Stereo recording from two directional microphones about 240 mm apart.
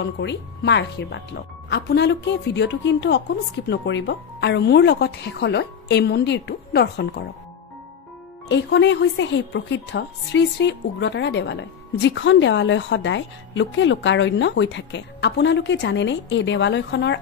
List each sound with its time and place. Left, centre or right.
0.0 s a woman's voice: left
8.5 s a woman's voice: left